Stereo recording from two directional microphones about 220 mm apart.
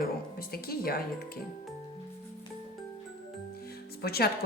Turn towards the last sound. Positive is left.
turn(degrees=45)  # may be behind; listen again after turning